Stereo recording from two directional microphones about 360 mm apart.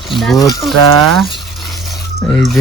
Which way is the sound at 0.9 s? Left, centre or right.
Right.